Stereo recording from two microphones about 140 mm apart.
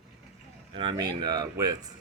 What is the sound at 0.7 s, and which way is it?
Speech, 35° right (ahead or behind).